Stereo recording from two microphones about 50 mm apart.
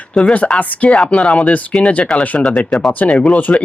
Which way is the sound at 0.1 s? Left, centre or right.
Centre.